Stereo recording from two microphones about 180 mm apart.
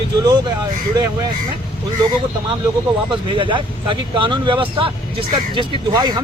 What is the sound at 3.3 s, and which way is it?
Speech, 30° right (ahead or behind).